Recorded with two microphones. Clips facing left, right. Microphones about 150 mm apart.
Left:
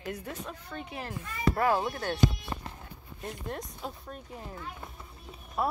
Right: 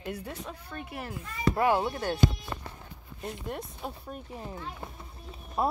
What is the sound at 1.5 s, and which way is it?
Speech, 20° right (ahead or behind).